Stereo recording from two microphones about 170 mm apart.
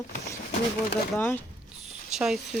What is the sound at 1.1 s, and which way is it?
Speech, 10° left (ahead or behind).